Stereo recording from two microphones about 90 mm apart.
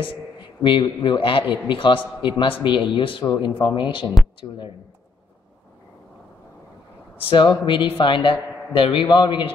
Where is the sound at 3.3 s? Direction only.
60° left (ahead or behind).